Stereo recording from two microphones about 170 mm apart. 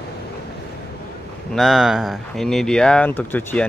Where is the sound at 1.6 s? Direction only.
Centre (ahead or behind).